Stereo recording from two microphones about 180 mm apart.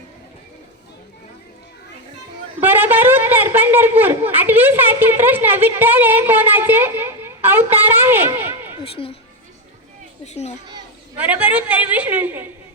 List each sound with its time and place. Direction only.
2.6 s a sound: 10° right (ahead or behind)
4.3 s a woman's voice: 10° right (ahead or behind)
8.8 s a woman's voice: 30° left (ahead or behind)
10.2 s a child's voice: 35° left (ahead or behind)
11.2 s a woman's voice: 10° right (ahead or behind)